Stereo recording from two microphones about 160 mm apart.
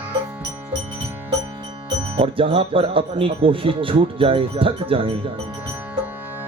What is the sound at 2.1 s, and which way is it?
Speech, 35° right (ahead or behind).